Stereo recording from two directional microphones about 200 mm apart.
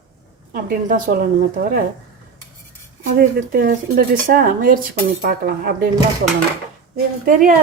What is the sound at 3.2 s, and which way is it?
Speech, 50° right (ahead or behind).